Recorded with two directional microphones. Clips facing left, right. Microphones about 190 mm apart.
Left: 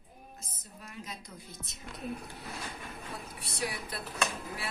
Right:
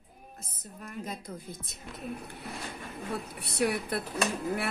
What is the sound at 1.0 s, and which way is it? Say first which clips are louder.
Speech: right 7 dB; 55° right (ahead or behind).